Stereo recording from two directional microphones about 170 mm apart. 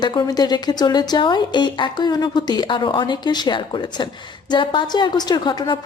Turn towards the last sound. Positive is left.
turn(degrees=25)  # may be behind; listen again after turning